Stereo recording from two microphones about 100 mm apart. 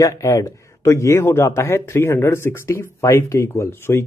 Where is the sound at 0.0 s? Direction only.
35° left (ahead or behind).